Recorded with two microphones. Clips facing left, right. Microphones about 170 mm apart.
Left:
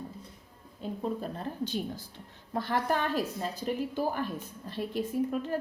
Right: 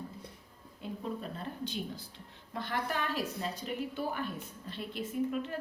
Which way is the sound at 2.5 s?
40° left (ahead or behind).